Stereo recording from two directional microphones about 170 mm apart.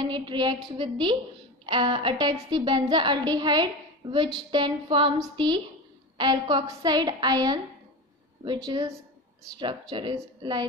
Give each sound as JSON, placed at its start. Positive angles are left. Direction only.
{"t": 0.0, "sound": "a woman's voice", "side_deg": -25}
{"t": 8.6, "sound": "a woman's voice", "side_deg": -20}